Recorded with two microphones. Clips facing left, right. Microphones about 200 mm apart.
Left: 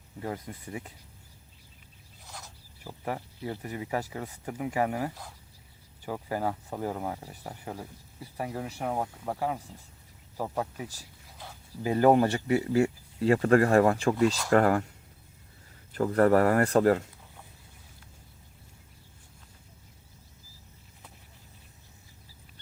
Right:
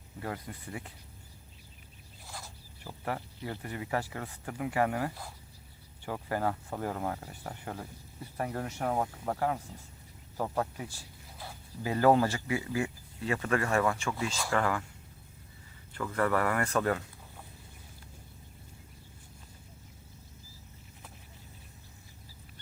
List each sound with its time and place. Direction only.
0.2 s speech: 20° left (ahead or behind)
2.2 s a sound: 5° right (ahead or behind)
2.8 s speech: 15° left (ahead or behind)
11.9 s speech: 20° left (ahead or behind)
13.2 s speech: 35° left (ahead or behind)
16.0 s speech: 40° left (ahead or behind)